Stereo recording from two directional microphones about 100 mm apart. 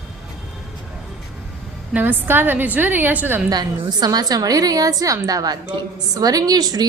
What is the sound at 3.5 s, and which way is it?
A woman's voice, 45° right (ahead or behind).